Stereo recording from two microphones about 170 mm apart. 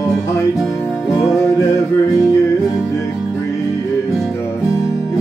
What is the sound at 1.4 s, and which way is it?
Music, 15° left (ahead or behind).